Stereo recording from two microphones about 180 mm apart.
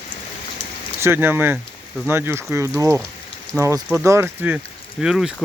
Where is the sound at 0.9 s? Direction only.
15° right (ahead or behind).